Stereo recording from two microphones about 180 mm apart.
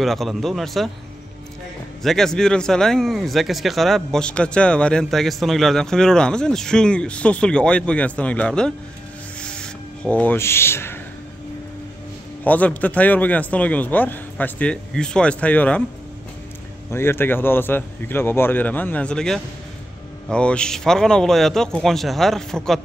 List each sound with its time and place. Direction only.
0.0 s speech: centre (ahead or behind)
2.0 s speech: 5° left (ahead or behind)
9.4 s a sound: 5° left (ahead or behind)
12.4 s a man's voice: 10° left (ahead or behind)
16.9 s a man's voice: 15° left (ahead or behind)